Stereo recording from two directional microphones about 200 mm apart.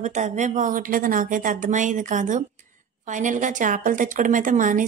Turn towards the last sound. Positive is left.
turn(degrees=-40)  # may be behind; listen again after turning